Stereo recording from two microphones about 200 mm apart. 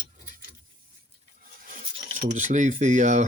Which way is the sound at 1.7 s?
40° right (ahead or behind).